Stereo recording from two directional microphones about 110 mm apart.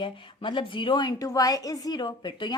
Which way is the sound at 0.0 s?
50° left (ahead or behind).